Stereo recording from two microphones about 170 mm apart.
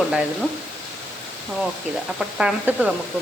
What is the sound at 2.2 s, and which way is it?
Speech, 5° right (ahead or behind).